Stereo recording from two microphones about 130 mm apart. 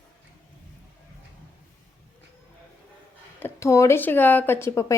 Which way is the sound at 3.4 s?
20° left (ahead or behind).